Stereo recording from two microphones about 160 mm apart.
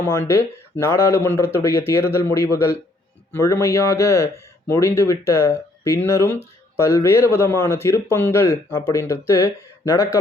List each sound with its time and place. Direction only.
0.0 s a man's voice: 15° left (ahead or behind)